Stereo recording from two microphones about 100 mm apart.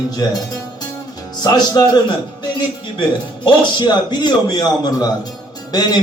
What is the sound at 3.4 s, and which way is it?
A man's voice, 50° left (ahead or behind).